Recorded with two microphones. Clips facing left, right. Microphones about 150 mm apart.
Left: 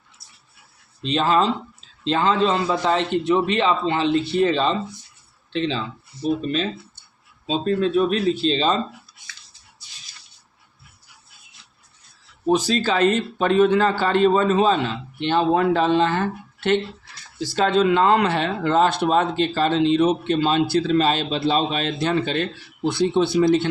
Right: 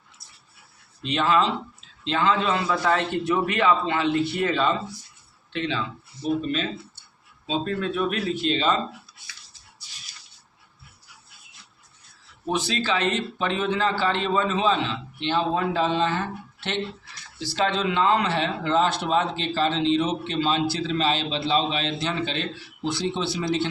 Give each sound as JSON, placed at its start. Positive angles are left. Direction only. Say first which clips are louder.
{"t": 1.0, "sound": "a man's voice", "louder": "left 3 dB", "side_deg": 35}
{"t": 7.4, "sound": "speech", "louder": "left 5 dB", "side_deg": 30}
{"t": 12.5, "sound": "speech", "louder": "left 6 dB", "side_deg": 40}